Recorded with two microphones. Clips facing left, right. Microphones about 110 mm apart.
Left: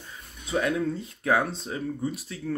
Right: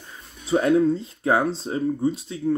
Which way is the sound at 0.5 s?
30° right (ahead or behind).